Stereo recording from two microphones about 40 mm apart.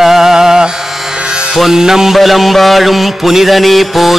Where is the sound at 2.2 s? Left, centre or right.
Centre.